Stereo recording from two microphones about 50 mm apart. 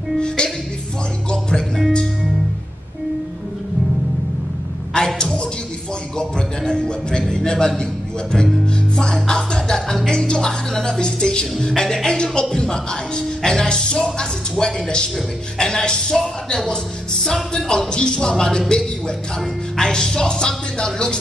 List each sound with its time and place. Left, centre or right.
0.4 s music: centre
1.8 s speech: centre
4.9 s a sound: centre
6.1 s music: centre
16.4 s speech: centre
18.7 s a sound: centre
19.8 s speech: centre